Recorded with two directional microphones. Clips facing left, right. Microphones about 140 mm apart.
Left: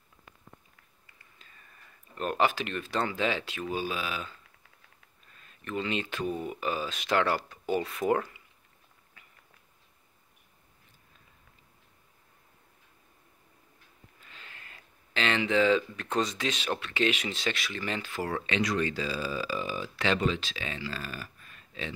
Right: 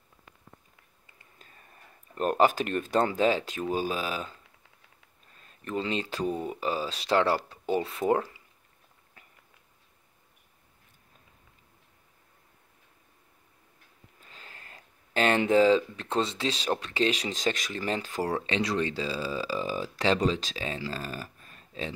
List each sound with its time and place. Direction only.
1.4 s speech: 40° right (ahead or behind)
14.2 s speech: 40° right (ahead or behind)